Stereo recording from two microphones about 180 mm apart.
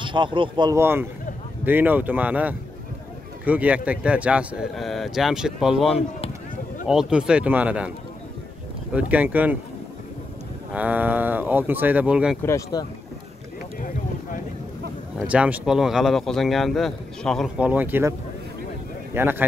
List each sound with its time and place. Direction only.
0.0 s speech: 25° right (ahead or behind)
0.7 s speech: 10° right (ahead or behind)
8.9 s speech: 10° right (ahead or behind)
10.7 s speech: 10° right (ahead or behind)
12.4 s speech: 15° left (ahead or behind)
15.1 s speech: 5° right (ahead or behind)
17.6 s speech: 10° right (ahead or behind)
19.1 s speech: 10° right (ahead or behind)